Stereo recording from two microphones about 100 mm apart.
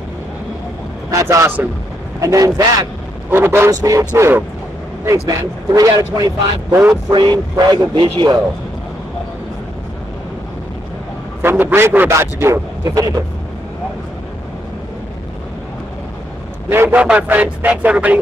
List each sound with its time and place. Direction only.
1.2 s a man's voice: 25° right (ahead or behind)
2.1 s a man's voice: 35° right (ahead or behind)
3.3 s a man's voice: 25° right (ahead or behind)
3.8 s a man's voice: 35° right (ahead or behind)
6.7 s speech: 15° right (ahead or behind)
7.1 s a sound: 45° right (ahead or behind)
11.4 s a man's voice: 20° right (ahead or behind); by 13.2 s 35° right (ahead or behind)
16.6 s a man's voice: 25° right (ahead or behind)
17.0 s speech: 15° right (ahead or behind)